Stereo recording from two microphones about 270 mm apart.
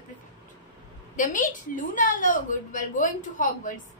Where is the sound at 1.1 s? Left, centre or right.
Left.